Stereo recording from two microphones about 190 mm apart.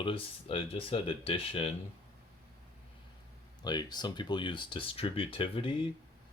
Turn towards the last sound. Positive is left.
turn(degrees=30)  # may be behind; listen again after turning